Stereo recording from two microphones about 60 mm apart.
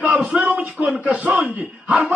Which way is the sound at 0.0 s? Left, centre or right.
Centre.